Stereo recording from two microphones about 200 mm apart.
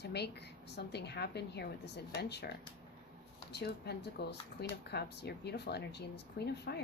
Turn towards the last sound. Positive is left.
turn(degrees=55)  # may be behind; listen again after turning